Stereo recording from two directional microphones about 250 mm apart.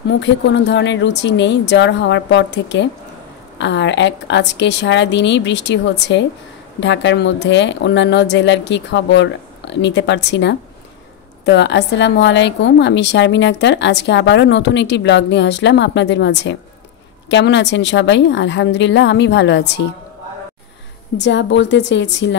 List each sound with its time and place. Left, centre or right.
0.1 s a woman's voice: left
21.2 s a woman's voice: left